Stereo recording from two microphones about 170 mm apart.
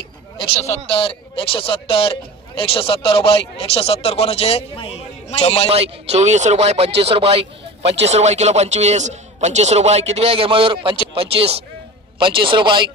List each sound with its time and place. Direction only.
0.4 s speech: 30° left (ahead or behind)
5.7 s a man's voice: 35° right (ahead or behind)